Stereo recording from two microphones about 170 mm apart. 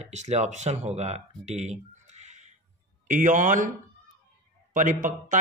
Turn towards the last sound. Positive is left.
turn(degrees=-50)  # may be behind; listen again after turning